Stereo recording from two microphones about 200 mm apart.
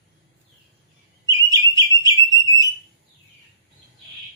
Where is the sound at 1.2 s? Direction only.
15° right (ahead or behind).